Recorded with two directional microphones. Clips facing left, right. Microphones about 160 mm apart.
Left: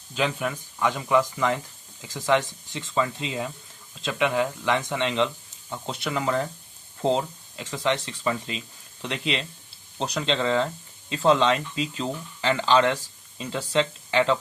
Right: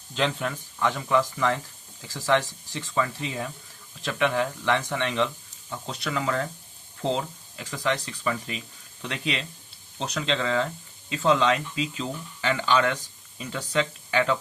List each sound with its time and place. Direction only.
0.1 s speech: 10° left (ahead or behind); by 6.4 s 25° left (ahead or behind)
7.5 s speech: 25° left (ahead or behind)